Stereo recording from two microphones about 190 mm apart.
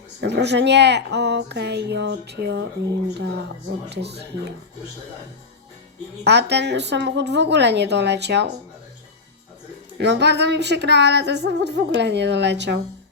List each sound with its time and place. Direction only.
0.2 s speech: 65° right (ahead or behind)
3.8 s speech: 60° right (ahead or behind)
6.2 s speech: 60° right (ahead or behind)
10.0 s speech: 65° right (ahead or behind)